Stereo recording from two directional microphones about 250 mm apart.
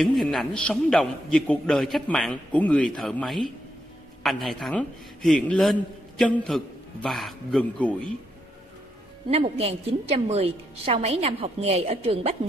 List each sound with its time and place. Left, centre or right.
0.0 s a man's voice: centre
9.3 s a woman's voice: right